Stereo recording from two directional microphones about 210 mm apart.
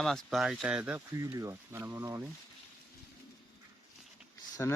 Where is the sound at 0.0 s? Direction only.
Centre (ahead or behind).